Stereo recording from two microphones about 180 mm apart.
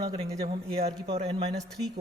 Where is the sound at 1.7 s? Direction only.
Centre (ahead or behind).